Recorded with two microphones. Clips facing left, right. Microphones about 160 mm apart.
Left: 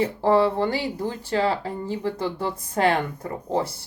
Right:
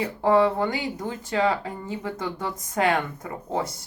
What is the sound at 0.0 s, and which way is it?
Speech, 30° left (ahead or behind).